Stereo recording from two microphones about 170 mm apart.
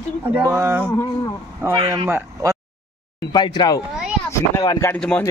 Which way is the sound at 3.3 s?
25° left (ahead or behind).